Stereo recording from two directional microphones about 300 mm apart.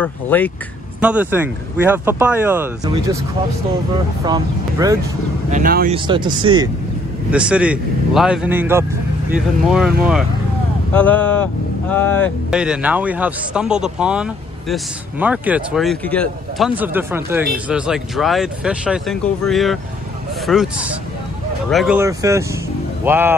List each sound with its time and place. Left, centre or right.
0.0 s speech: centre
1.0 s speech: centre
4.2 s speech: centre
5.5 s speech: right
5.9 s speech: centre
7.2 s speech: centre